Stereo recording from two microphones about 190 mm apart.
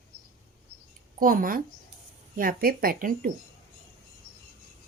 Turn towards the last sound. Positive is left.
turn(degrees=-45)  # may be behind; listen again after turning